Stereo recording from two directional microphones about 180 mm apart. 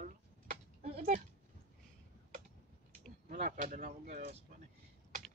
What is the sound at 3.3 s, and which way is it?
Speech, 50° right (ahead or behind).